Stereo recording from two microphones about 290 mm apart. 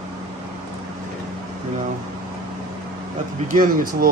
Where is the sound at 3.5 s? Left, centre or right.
Right.